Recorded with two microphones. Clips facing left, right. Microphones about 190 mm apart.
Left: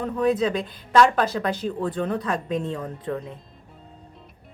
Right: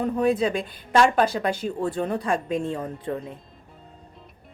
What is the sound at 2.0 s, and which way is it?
Speech, 10° right (ahead or behind).